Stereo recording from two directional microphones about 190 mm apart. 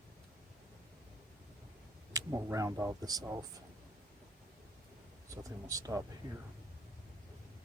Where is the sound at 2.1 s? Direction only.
20° right (ahead or behind).